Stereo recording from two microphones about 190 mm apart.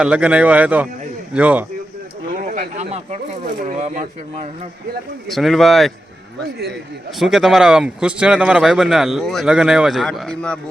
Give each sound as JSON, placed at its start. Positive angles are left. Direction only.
{"t": 0.0, "sound": "speech", "side_deg": -5}
{"t": 2.3, "sound": "a sound", "side_deg": -45}
{"t": 3.6, "sound": "speech", "side_deg": -40}
{"t": 5.3, "sound": "speech", "side_deg": 0}
{"t": 7.2, "sound": "speech", "side_deg": 0}